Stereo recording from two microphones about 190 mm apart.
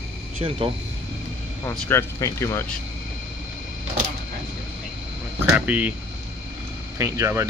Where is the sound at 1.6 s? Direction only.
15° left (ahead or behind).